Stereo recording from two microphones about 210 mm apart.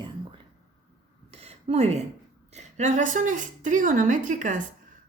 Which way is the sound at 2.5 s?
35° right (ahead or behind).